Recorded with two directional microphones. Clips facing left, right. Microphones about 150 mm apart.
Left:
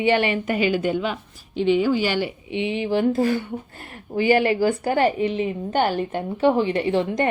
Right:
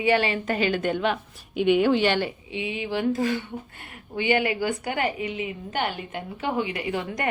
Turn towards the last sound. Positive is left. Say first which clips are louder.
# left 8 dB
turn(degrees=30)  # may be behind; listen again after turning